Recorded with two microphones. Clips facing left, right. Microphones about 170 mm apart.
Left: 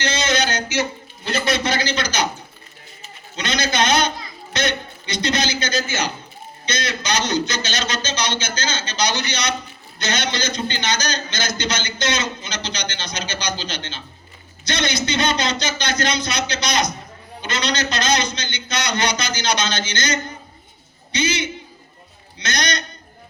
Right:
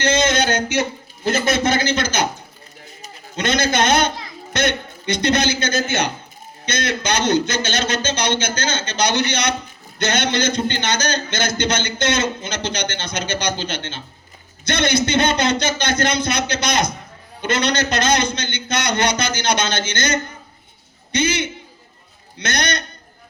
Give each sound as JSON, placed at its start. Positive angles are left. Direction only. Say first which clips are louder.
{"t": 0.0, "sound": "a man's voice", "louder": "right 4 dB", "side_deg": -50}